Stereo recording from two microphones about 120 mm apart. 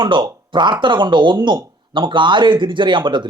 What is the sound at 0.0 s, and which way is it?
Speech, 40° right (ahead or behind).